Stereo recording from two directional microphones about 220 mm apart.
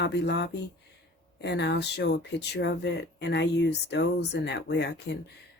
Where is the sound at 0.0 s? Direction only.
50° left (ahead or behind).